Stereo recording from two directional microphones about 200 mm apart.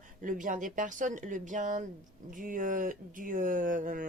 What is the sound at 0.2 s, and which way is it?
Speech, 40° right (ahead or behind).